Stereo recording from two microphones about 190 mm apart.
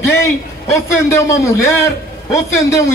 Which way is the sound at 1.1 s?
15° left (ahead or behind).